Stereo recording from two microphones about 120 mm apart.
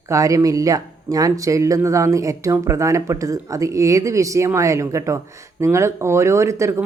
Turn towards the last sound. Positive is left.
turn(degrees=-25)  # may be behind; listen again after turning